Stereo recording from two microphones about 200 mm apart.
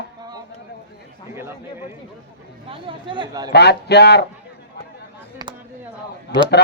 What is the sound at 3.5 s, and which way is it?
Speech, 55° left (ahead or behind).